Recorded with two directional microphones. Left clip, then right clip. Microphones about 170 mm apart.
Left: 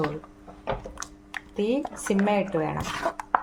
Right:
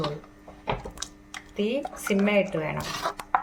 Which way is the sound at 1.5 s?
70° left (ahead or behind).